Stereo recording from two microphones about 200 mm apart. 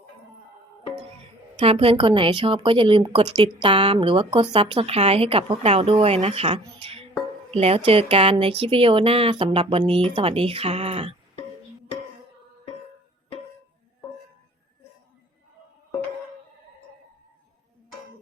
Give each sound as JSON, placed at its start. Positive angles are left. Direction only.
{"t": 1.5, "sound": "speech", "side_deg": -30}